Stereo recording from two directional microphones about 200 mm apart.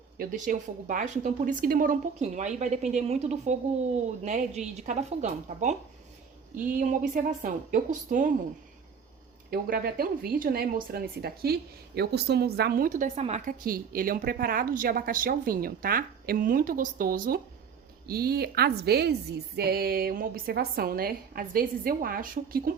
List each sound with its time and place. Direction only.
0.2 s a woman's voice: 40° right (ahead or behind)
9.5 s speech: 50° right (ahead or behind)